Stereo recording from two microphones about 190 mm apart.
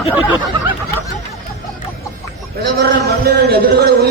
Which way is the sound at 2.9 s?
55° right (ahead or behind).